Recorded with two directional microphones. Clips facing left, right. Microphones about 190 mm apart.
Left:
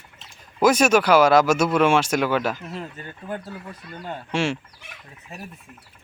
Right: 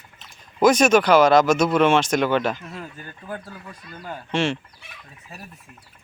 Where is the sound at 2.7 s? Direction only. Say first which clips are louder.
Left 2 dB; 25° left (ahead or behind).